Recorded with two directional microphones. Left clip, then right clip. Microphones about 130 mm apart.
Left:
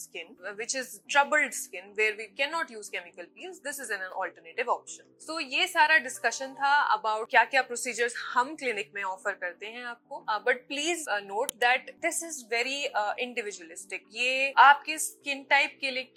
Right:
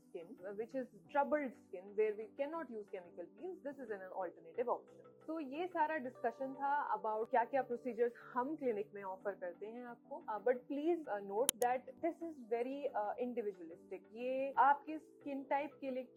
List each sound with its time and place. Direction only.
0.1 s a woman's voice: 40° right (ahead or behind)
12.5 s a woman's voice: 45° right (ahead or behind)